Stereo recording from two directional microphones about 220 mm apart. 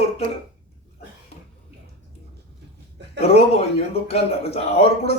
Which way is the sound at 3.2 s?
30° left (ahead or behind).